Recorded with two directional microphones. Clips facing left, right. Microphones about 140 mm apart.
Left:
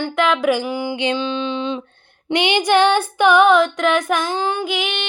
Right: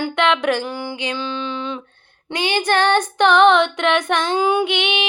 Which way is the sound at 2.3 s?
20° left (ahead or behind).